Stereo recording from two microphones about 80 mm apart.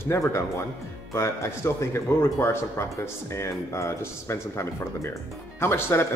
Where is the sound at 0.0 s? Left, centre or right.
Left.